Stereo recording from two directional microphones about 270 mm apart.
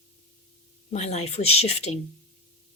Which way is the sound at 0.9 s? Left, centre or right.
Left.